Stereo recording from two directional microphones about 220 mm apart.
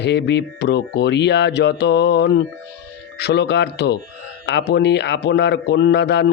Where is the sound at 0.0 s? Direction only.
50° left (ahead or behind).